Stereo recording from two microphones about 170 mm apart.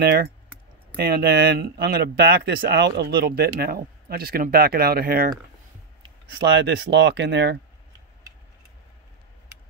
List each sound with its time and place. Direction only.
0.0 s speech: 65° right (ahead or behind)
6.2 s speech: 90° right